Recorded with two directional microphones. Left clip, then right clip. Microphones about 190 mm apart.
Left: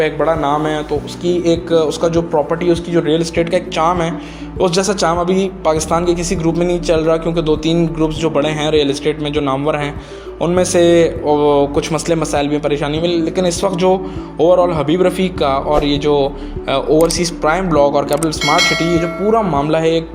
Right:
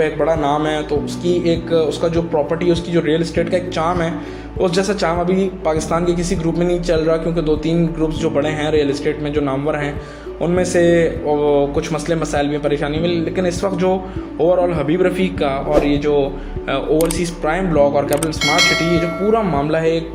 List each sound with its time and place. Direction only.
0.0 s a man's voice: 35° left (ahead or behind)
18.4 s speech: centre (ahead or behind)
19.3 s a man's voice: 35° left (ahead or behind)